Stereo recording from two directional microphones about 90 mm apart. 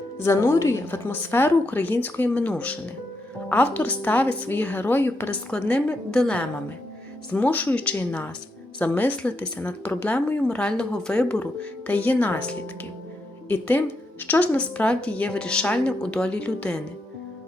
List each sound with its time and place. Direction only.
0.3 s a woman's voice: 30° left (ahead or behind); by 16.8 s 10° left (ahead or behind)